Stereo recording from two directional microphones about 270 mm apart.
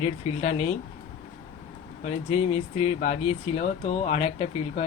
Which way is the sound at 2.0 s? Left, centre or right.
Left.